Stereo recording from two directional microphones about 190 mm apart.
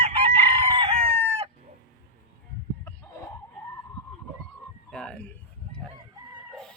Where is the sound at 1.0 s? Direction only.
35° right (ahead or behind).